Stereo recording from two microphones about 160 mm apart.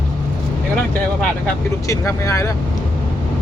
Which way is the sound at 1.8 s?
20° left (ahead or behind).